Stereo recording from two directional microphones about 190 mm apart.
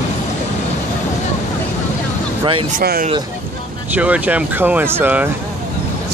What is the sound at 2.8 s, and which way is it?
Speech, 50° right (ahead or behind).